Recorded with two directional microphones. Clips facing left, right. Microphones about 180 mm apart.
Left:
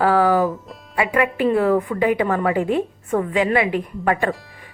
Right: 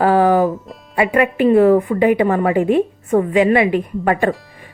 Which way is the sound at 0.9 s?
25° right (ahead or behind).